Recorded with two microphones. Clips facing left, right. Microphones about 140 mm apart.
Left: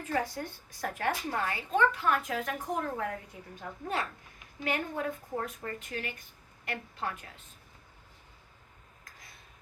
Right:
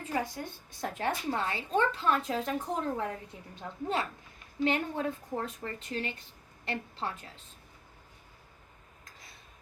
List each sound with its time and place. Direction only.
0.1 s a woman's voice: 20° right (ahead or behind)